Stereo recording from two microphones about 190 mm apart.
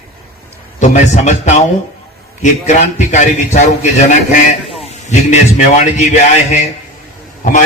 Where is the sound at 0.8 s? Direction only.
40° left (ahead or behind).